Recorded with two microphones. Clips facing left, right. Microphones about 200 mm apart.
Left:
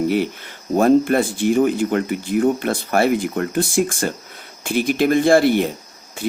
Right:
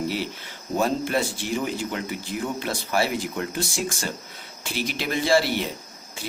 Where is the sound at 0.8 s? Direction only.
55° left (ahead or behind).